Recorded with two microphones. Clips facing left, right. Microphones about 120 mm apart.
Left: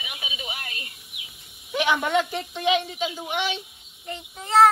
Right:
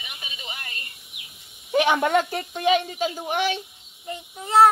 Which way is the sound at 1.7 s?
45° right (ahead or behind).